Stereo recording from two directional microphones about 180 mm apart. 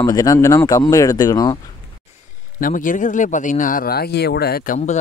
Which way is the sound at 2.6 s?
45° left (ahead or behind).